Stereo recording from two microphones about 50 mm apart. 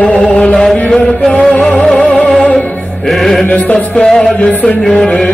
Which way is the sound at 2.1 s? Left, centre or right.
Centre.